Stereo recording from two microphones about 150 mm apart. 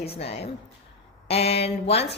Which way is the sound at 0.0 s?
40° left (ahead or behind).